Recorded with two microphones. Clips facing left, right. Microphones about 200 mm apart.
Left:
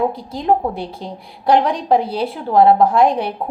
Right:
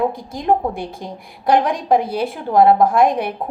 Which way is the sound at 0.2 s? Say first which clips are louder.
Left 1 dB; 50° right (ahead or behind).